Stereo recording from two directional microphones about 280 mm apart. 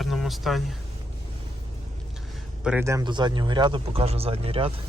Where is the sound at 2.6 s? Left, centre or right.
Centre.